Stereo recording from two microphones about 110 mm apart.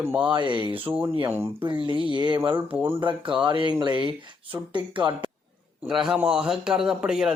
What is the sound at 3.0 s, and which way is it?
Speech, 50° right (ahead or behind).